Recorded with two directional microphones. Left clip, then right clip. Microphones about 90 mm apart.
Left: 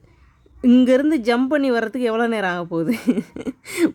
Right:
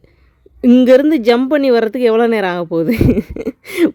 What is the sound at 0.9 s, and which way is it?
Speech, 35° right (ahead or behind).